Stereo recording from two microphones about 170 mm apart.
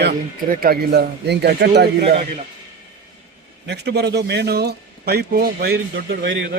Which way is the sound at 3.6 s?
80° right.